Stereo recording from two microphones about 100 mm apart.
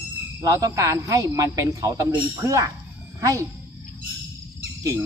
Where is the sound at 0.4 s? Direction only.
35° right (ahead or behind).